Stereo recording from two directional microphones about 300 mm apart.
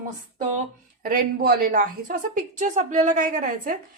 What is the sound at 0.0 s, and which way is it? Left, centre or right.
A woman's voice, right.